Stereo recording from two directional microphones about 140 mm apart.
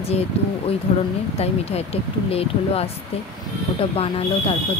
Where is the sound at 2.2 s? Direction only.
45° left (ahead or behind).